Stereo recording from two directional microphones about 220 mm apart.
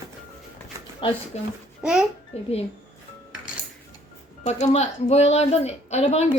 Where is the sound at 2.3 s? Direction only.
30° left (ahead or behind).